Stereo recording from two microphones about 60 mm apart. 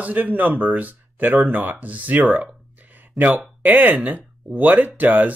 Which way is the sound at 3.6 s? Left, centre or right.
Right.